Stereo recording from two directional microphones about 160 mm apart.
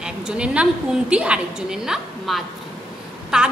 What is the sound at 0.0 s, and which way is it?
A woman's voice, 5° right (ahead or behind).